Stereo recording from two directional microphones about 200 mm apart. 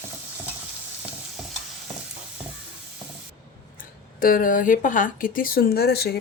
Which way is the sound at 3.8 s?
45° left (ahead or behind).